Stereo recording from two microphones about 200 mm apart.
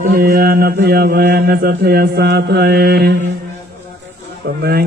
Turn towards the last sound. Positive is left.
turn(degrees=-50)  # may be behind; listen again after turning